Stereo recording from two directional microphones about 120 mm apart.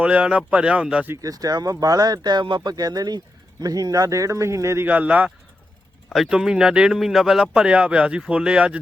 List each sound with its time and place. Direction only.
0.0 s speech: 10° right (ahead or behind)
1.1 s speech: 30° right (ahead or behind); by 8.8 s 10° right (ahead or behind)